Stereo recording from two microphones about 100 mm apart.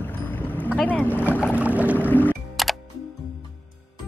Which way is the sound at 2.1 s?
15° left (ahead or behind).